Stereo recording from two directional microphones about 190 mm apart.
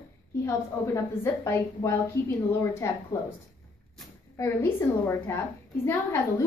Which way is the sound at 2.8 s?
15° left (ahead or behind).